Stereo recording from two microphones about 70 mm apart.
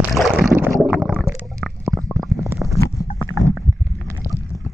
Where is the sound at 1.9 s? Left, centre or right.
Centre.